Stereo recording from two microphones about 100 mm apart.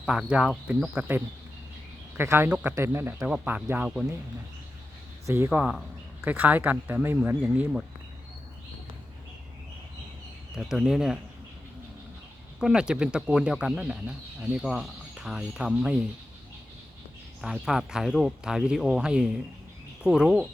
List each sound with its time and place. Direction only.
0.0 s speech: 5° right (ahead or behind)
0.9 s speech: 20° right (ahead or behind)
2.5 s speech: 10° right (ahead or behind)
2.7 s speech: 25° right (ahead or behind); by 4.1 s 10° right (ahead or behind)
5.2 s speech: 30° right (ahead or behind)
5.5 s speech: 10° right (ahead or behind)
10.5 s speech: 5° right (ahead or behind)
12.5 s speech: 10° right (ahead or behind)
17.4 s speech: 5° right (ahead or behind)